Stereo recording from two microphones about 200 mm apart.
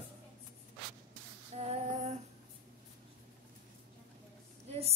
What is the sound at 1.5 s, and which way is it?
Female singing, 35° right (ahead or behind).